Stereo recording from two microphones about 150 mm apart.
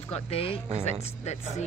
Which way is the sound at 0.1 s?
40° left (ahead or behind).